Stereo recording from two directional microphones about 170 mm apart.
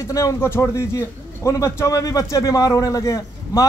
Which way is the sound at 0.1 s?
20° left (ahead or behind).